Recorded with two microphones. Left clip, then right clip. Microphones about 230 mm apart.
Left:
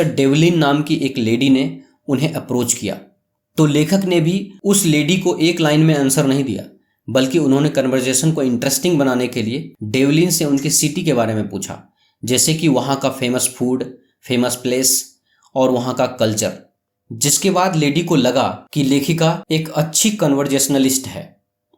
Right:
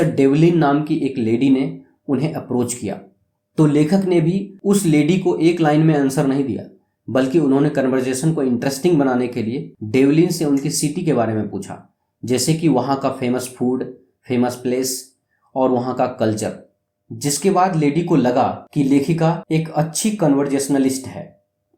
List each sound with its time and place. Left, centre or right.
0.2 s speech: left
14.8 s speech: left
15.5 s speech: left